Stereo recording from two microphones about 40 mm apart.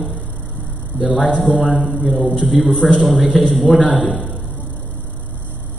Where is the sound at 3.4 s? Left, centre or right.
Left.